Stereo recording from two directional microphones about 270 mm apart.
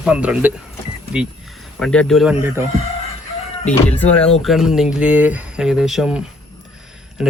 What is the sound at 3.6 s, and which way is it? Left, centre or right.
Speech, centre.